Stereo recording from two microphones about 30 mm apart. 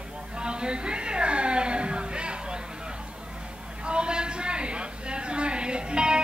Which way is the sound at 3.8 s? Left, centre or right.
Right.